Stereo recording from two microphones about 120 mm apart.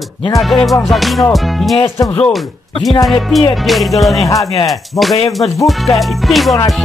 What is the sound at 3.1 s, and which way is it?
Music, centre (ahead or behind).